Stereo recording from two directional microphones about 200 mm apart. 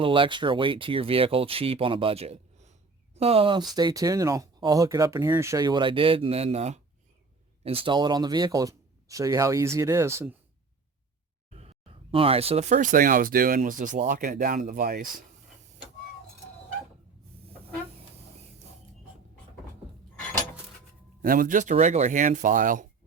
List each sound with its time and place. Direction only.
0.0 s speech: 25° right (ahead or behind)
11.5 s speech: 30° right (ahead or behind); by 15.0 s 45° right (ahead or behind)
21.2 s speech: 45° right (ahead or behind)